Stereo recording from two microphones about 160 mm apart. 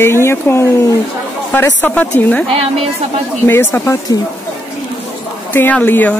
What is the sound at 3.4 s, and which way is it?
Speech, 15° left (ahead or behind).